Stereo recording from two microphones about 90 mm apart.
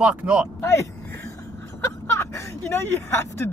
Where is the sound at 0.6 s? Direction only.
30° left (ahead or behind).